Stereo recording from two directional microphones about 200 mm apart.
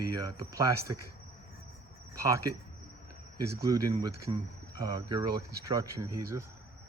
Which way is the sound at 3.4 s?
15° right (ahead or behind).